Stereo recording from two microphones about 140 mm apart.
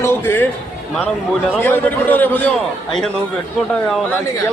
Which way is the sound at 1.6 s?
15° left (ahead or behind).